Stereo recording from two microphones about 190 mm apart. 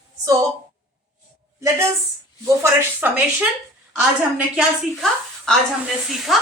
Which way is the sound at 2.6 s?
10° right (ahead or behind).